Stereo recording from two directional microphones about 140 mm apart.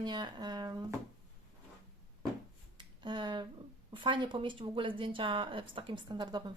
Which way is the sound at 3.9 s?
35° right (ahead or behind).